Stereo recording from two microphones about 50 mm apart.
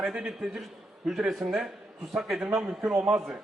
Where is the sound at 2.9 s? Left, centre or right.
Centre.